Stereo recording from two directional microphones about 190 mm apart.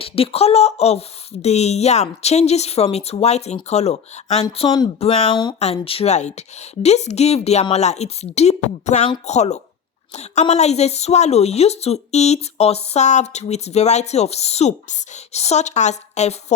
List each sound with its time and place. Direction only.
0.0 s a woman's voice: 30° left (ahead or behind)
5.3 s speech: 20° left (ahead or behind)
5.5 s a woman's voice: 30° left (ahead or behind)